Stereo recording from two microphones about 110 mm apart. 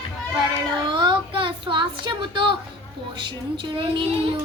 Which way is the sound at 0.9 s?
45° right (ahead or behind).